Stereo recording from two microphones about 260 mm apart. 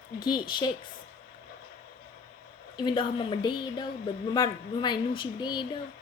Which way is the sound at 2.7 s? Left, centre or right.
Centre.